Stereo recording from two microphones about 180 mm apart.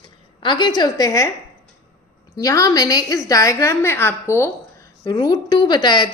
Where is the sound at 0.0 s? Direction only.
25° left (ahead or behind).